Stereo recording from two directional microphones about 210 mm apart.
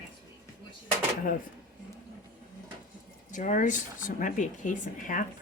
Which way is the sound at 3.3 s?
35° left (ahead or behind).